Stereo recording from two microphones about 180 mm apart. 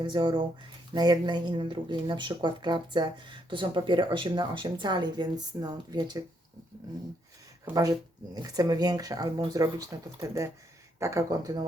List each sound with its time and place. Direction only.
0.0 s speech: 25° right (ahead or behind)
7.6 s speech: 20° right (ahead or behind)